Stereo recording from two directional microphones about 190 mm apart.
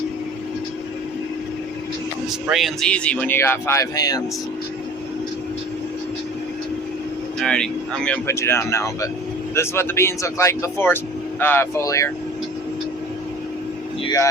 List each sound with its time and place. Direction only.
2.5 s speech: centre (ahead or behind); by 4.2 s 20° left (ahead or behind)
7.3 s speech: 5° left (ahead or behind)
14.0 s speech: 20° left (ahead or behind)